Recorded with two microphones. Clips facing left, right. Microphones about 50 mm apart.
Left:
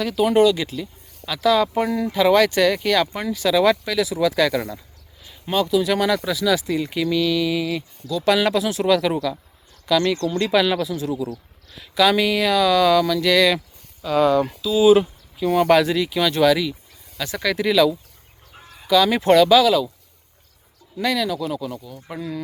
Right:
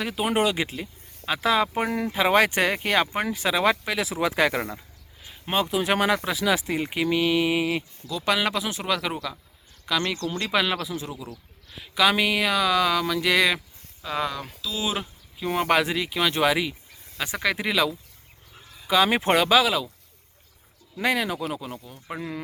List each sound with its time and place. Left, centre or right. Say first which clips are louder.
0.0 s speech: left 7 dB; right
8.2 s speech: left 6 dB; centre
14.0 s speech: left 10 dB; centre
14.3 s speech: left 13 dB; centre
15.4 s speech: left 6 dB; centre
20.9 s speech: left 3 dB; right